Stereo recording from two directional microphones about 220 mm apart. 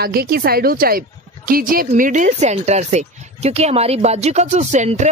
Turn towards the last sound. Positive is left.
turn(degrees=-30)  # may be behind; listen again after turning